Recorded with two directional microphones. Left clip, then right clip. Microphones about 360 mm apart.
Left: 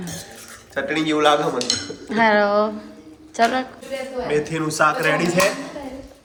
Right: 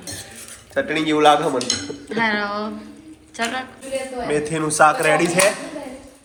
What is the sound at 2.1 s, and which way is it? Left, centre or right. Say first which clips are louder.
Speech: left 5 dB; left.